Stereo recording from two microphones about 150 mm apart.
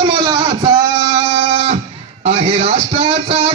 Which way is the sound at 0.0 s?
30° right (ahead or behind).